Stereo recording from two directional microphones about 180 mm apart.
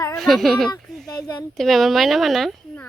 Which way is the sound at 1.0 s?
20° left (ahead or behind).